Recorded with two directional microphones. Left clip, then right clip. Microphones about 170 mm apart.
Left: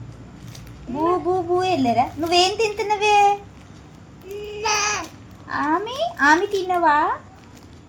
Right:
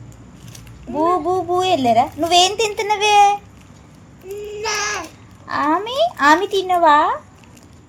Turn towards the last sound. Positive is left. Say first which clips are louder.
# right 5 dB
turn(degrees=-90)